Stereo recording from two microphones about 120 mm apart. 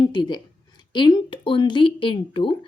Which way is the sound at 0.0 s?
40° left (ahead or behind).